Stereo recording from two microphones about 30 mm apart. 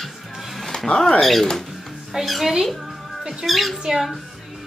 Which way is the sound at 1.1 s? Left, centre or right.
Centre.